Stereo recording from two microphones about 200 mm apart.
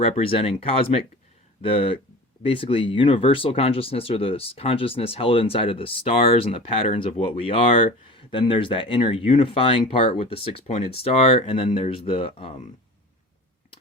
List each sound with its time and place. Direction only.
0.0 s speech: 30° left (ahead or behind)